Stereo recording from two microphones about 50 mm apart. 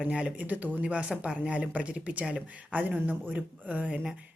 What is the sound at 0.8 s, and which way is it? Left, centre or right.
A woman's voice, right.